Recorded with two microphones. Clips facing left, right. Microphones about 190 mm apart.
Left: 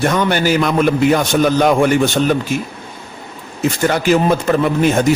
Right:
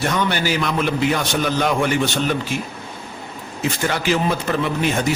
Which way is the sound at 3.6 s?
45° left (ahead or behind).